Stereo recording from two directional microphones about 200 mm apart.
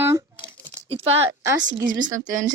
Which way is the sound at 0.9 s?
30° right (ahead or behind).